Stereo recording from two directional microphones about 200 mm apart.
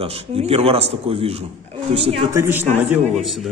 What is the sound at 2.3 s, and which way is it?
Speech, 10° right (ahead or behind).